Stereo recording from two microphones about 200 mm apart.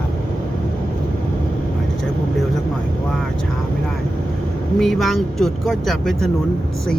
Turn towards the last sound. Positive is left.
turn(degrees=0)  # may be behind; listen again after turning